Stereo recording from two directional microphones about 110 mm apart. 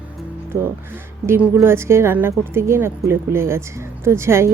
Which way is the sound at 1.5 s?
25° right (ahead or behind).